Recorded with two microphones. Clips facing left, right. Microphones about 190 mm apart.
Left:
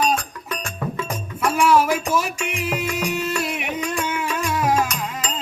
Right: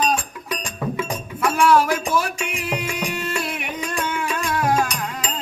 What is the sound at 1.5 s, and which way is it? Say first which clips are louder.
Music: even; 5° left (ahead or behind).